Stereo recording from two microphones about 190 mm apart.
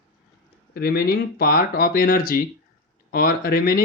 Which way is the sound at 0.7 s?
55° left (ahead or behind).